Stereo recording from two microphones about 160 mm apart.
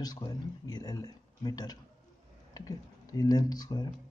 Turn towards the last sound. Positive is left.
turn(degrees=25)  # may be behind; listen again after turning